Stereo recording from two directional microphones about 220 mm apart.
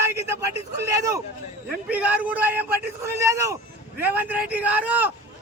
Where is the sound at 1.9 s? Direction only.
5° right (ahead or behind).